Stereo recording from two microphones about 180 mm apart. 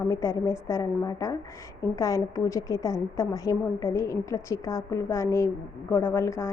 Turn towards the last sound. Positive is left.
turn(degrees=15)  # may be behind; listen again after turning